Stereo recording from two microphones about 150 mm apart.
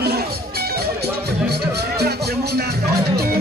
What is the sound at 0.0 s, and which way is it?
Music, 90° right.